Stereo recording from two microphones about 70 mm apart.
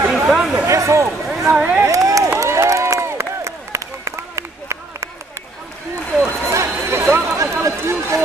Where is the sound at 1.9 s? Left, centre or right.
Right.